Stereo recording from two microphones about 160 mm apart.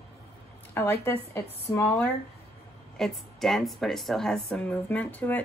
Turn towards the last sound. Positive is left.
turn(degrees=10)  # may be behind; listen again after turning